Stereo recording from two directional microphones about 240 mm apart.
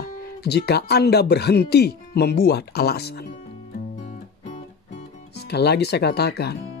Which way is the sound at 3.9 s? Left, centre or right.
Left.